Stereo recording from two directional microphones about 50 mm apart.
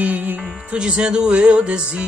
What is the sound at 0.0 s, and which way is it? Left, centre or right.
Music, right.